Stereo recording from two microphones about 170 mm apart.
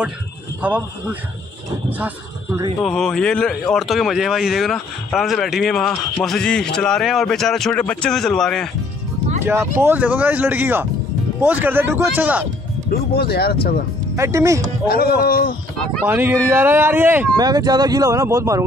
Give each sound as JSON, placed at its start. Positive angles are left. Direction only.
{"t": 0.6, "sound": "speech", "side_deg": -10}
{"t": 1.9, "sound": "speech", "side_deg": -10}
{"t": 2.8, "sound": "speech", "side_deg": 0}
{"t": 9.4, "sound": "speech", "side_deg": -15}
{"t": 12.9, "sound": "speech", "side_deg": 65}
{"t": 14.1, "sound": "speech", "side_deg": -15}
{"t": 14.9, "sound": "speech", "side_deg": 65}
{"t": 16.1, "sound": "speech", "side_deg": -15}
{"t": 17.4, "sound": "speech", "side_deg": -20}